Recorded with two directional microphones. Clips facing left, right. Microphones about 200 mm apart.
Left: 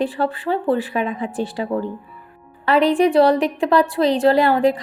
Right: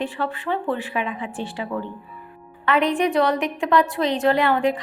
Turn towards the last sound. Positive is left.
turn(degrees=35)  # may be behind; listen again after turning